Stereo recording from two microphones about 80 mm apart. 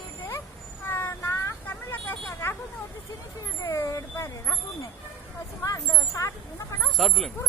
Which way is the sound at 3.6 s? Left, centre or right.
Left.